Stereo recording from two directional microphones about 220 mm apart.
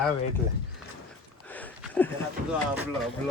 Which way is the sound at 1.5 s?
5° left (ahead or behind).